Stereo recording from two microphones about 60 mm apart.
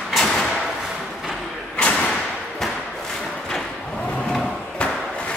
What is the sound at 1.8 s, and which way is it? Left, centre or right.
Thump, left.